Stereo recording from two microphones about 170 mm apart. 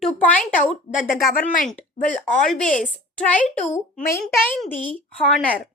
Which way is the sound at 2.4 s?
5° left (ahead or behind).